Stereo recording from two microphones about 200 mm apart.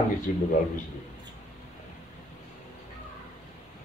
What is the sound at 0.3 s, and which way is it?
Speech, 45° left (ahead or behind).